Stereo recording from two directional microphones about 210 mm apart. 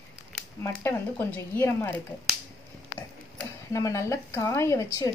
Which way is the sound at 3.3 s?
15° left (ahead or behind).